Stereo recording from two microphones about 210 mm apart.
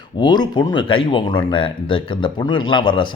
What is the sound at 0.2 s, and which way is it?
Speech, 20° left (ahead or behind).